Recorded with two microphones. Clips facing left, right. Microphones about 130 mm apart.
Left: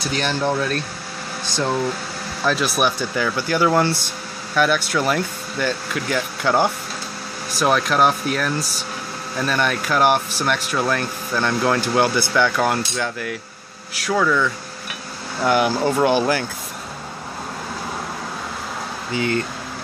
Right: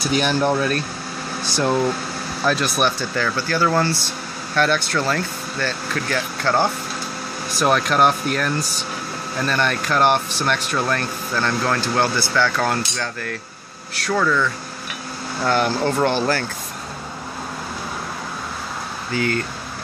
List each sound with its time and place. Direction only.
0.1 s speech: 10° right (ahead or behind)
2.4 s speech: 5° left (ahead or behind)
4.6 s speech: 5° left (ahead or behind)
7.5 s speech: centre (ahead or behind)
19.1 s speech: 20° left (ahead or behind)